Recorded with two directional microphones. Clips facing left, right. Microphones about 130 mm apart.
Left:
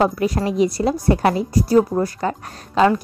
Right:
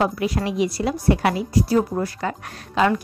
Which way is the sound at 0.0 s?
40° left (ahead or behind).